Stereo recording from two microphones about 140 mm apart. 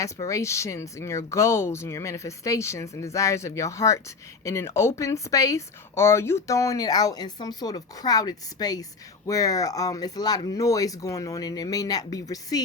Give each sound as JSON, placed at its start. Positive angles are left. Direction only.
{"t": 0.0, "sound": "a woman's voice", "side_deg": 25}